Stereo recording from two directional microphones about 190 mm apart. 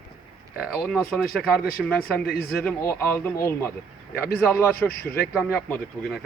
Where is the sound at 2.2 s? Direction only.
55° left (ahead or behind).